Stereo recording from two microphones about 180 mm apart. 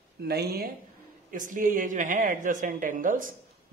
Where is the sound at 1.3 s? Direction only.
50° right (ahead or behind).